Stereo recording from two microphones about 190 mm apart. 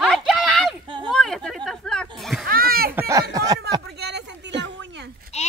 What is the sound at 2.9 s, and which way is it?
Speech, 15° right (ahead or behind).